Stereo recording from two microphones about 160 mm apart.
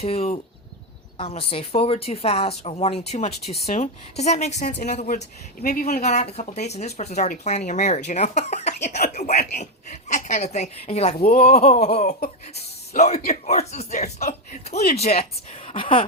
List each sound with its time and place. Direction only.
0.0 s speech: 40° left (ahead or behind)
3.4 s speech: centre (ahead or behind)
3.7 s speech: 45° left (ahead or behind)
5.5 s speech: 65° left (ahead or behind)
6.3 s speech: 45° left (ahead or behind)
14.2 s speech: 55° left (ahead or behind); by 16.0 s 35° left (ahead or behind)